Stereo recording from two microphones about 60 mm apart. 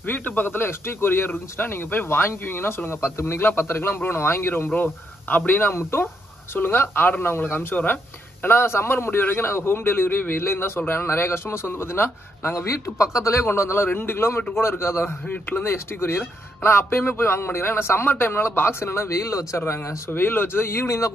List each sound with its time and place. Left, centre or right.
0.0 s speech: left
4.7 s a man's voice: left
12.6 s speech: left
13.5 s a man's voice: left
19.6 s a man's voice: left